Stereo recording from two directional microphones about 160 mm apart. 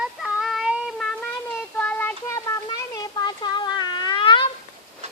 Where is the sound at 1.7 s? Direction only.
10° left (ahead or behind); by 4.5 s 30° left (ahead or behind).